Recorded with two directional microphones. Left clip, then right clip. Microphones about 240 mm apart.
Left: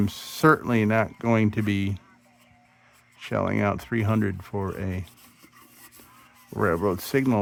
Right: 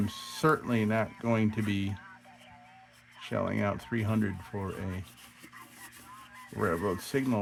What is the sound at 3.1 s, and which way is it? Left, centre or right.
Speech, left.